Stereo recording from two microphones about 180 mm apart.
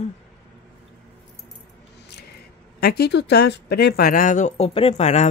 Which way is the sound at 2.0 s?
65° left (ahead or behind).